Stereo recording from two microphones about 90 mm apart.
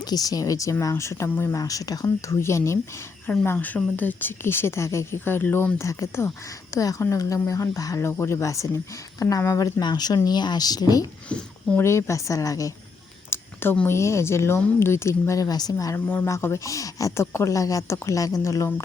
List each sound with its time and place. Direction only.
0.0 s speech: 45° left (ahead or behind)
3.2 s speech: 20° left (ahead or behind); by 11.0 s 45° left (ahead or behind)
11.3 s speech: 10° left (ahead or behind)
11.8 s speech: 30° left (ahead or behind)
13.3 s a sound: 25° left (ahead or behind)
13.8 s speech: 30° left (ahead or behind)
16.0 s speech: 20° left (ahead or behind)
16.3 s speech: 30° left (ahead or behind)